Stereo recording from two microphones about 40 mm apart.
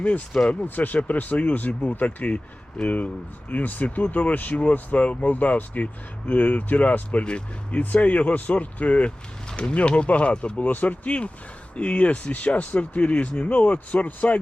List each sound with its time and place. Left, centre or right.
0.6 s speech: left
10.6 s speech: left